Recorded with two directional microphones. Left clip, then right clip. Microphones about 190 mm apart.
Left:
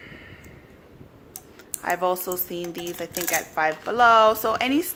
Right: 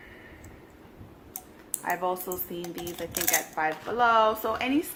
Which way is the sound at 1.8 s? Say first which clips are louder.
Left 5 dB; 55° left (ahead or behind).